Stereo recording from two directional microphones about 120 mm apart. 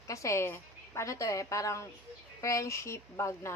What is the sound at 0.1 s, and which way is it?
A woman's voice, 25° left (ahead or behind).